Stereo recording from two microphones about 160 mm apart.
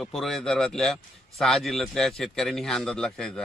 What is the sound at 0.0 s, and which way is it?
Speech, centre (ahead or behind).